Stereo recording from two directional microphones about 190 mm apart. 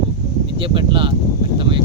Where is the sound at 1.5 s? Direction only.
25° right (ahead or behind).